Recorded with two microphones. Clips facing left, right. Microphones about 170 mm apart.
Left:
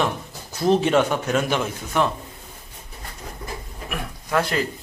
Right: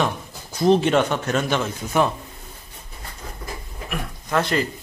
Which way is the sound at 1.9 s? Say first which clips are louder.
Right 2 dB; 5° right (ahead or behind).